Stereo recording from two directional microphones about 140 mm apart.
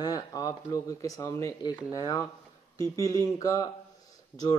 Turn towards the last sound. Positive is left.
turn(degrees=30)  # may be behind; listen again after turning